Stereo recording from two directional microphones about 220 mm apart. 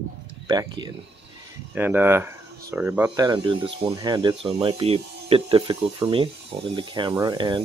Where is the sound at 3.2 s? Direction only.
20° right (ahead or behind).